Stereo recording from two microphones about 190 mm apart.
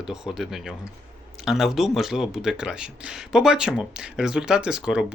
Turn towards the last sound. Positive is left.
turn(degrees=-5)  # may be behind; listen again after turning